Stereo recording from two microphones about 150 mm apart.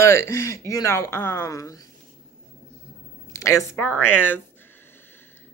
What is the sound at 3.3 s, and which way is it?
Speech, 20° left (ahead or behind).